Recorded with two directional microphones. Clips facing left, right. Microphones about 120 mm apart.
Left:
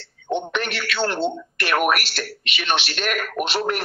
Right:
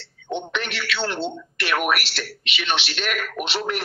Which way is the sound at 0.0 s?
45° left (ahead or behind).